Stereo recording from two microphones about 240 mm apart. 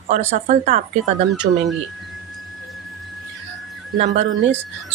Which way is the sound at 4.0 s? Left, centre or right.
Right.